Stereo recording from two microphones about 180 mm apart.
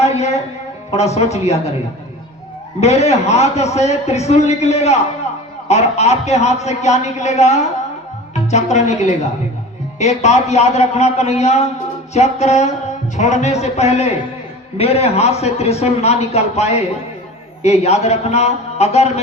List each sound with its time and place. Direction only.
0.0 s a sound: 35° left (ahead or behind)
0.9 s a man's voice: 35° left (ahead or behind)
2.8 s a man's voice: 35° left (ahead or behind)